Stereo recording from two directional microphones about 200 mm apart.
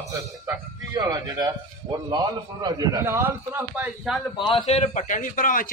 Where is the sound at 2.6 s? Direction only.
15° right (ahead or behind).